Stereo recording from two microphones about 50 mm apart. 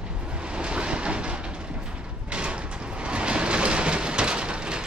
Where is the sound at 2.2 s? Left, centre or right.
Right.